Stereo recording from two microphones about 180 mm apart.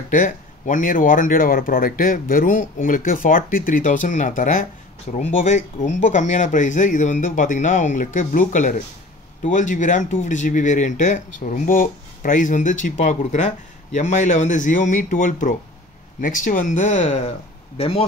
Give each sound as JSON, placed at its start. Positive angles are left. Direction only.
{"t": 0.1, "sound": "speech", "side_deg": 45}
{"t": 17.7, "sound": "speech", "side_deg": 30}